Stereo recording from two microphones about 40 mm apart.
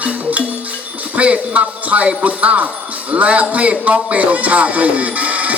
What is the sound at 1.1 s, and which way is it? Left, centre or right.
Speech, right.